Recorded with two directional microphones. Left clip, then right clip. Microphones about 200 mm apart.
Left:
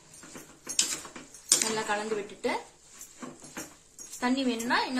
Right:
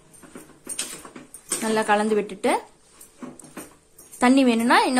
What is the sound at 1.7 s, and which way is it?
Speech, 45° right (ahead or behind).